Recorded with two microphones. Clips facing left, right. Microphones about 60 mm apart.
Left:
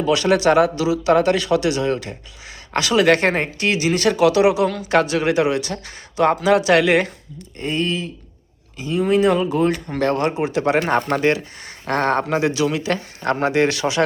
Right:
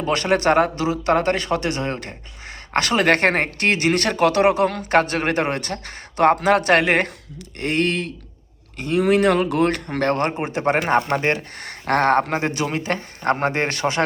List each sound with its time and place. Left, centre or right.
0.0 s speech: right
7.6 s speech: right
11.5 s speech: right